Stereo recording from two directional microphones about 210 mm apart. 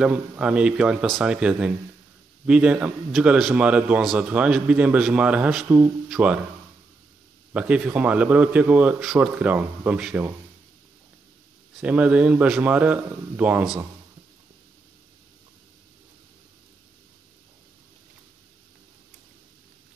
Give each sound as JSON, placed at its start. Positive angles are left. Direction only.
{"t": 0.0, "sound": "a man's voice", "side_deg": -5}
{"t": 7.5, "sound": "a man's voice", "side_deg": -5}
{"t": 11.8, "sound": "a man's voice", "side_deg": -5}